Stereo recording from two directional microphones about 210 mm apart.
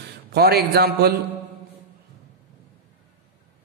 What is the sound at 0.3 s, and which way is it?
Speech, 50° right (ahead or behind).